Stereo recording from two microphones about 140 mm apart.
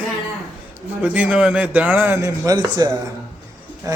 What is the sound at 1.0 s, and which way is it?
A man's voice, 10° right (ahead or behind).